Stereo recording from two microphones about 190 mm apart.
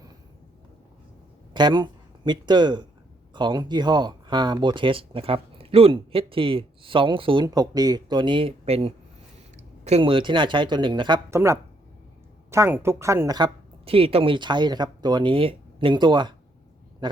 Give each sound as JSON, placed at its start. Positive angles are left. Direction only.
{"t": 1.5, "sound": "speech", "side_deg": -25}
{"t": 11.3, "sound": "speech", "side_deg": -15}